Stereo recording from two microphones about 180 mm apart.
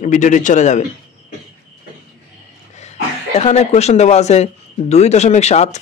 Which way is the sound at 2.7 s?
40° left (ahead or behind).